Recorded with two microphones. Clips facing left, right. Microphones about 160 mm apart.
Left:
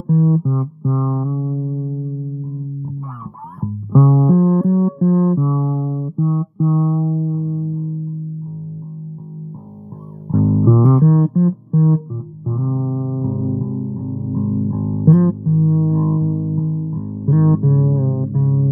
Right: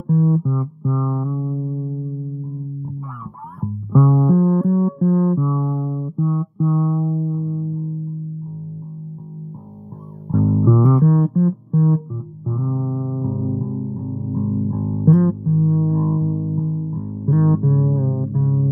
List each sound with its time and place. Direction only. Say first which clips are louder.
0.0 s music: left 2 dB; 40° left (ahead or behind)
3.9 s music: left 2 dB; 35° left (ahead or behind)
10.3 s guitar: left 2 dB; 35° left (ahead or behind)
12.4 s music: left 2 dB; 30° left (ahead or behind)